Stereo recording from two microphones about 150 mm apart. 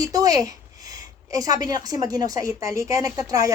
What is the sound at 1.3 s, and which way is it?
A woman's voice, 25° right (ahead or behind).